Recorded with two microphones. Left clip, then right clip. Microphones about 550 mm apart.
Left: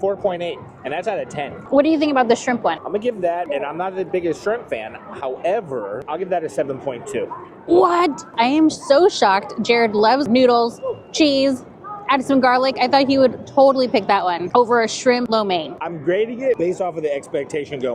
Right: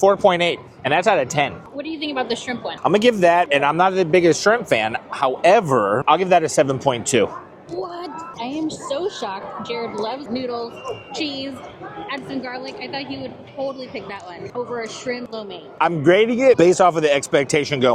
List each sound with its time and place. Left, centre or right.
0.3 s speech: right
1.7 s a woman's voice: left
2.8 s speech: right
7.8 s a woman's voice: left
9.6 s speech: left
10.0 s a woman's voice: left
15.8 s speech: right